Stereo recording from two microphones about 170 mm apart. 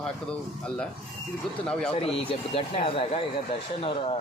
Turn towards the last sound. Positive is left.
turn(degrees=35)  # may be behind; listen again after turning